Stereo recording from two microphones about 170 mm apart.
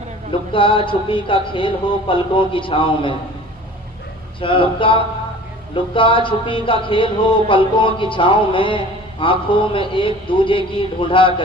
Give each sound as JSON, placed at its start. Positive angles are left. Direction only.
{"t": 0.3, "sound": "speech", "side_deg": 30}
{"t": 4.4, "sound": "speech", "side_deg": 30}